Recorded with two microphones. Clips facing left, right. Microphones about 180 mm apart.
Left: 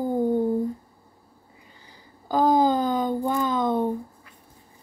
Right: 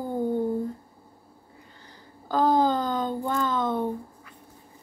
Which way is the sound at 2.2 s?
10° left (ahead or behind).